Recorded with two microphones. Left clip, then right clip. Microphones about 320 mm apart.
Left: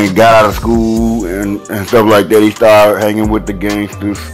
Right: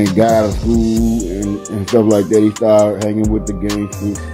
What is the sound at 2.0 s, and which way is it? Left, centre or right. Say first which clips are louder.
Speech: left 5 dB; left.